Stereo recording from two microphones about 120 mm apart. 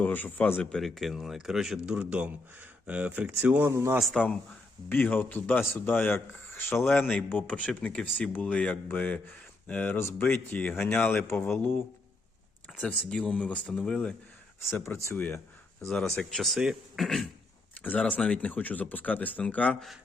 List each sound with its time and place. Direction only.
0.0 s speech: 15° left (ahead or behind); by 3.7 s 10° right (ahead or behind)
3.7 s speech: 25° right (ahead or behind)
4.0 s speech: centre (ahead or behind)
4.9 s speech: 15° left (ahead or behind)
13.1 s speech: 10° left (ahead or behind)
14.8 s speech: 20° left (ahead or behind)
15.9 s speech: 5° left (ahead or behind)
17.8 s speech: 15° left (ahead or behind)